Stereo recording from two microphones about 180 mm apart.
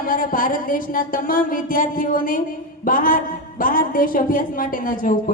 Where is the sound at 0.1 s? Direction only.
50° left (ahead or behind).